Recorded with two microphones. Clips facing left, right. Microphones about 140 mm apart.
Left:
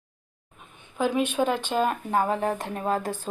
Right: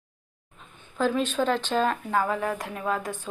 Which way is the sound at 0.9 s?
10° left (ahead or behind).